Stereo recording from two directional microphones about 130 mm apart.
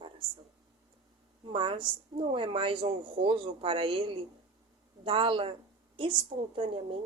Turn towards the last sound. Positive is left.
turn(degrees=-45)  # may be behind; listen again after turning